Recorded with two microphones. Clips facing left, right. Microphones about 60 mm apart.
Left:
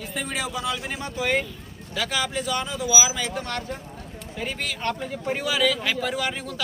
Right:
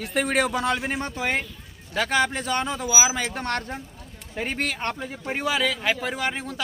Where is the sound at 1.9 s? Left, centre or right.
Right.